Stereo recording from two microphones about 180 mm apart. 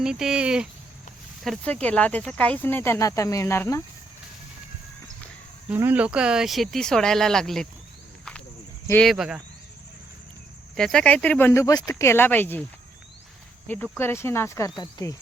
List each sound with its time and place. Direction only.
0.0 s speech: 5° right (ahead or behind)
1.5 s speech: 10° left (ahead or behind)
5.7 s speech: 10° right (ahead or behind)
8.9 s speech: 5° left (ahead or behind)
10.8 s speech: 5° left (ahead or behind)
13.7 s speech: 10° left (ahead or behind)